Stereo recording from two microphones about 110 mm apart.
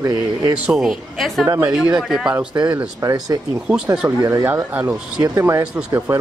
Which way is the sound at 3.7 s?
5° right (ahead or behind).